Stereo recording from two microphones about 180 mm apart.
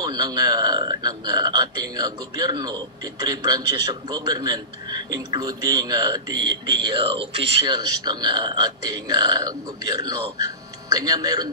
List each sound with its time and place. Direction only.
0.0 s a man's voice: 20° right (ahead or behind)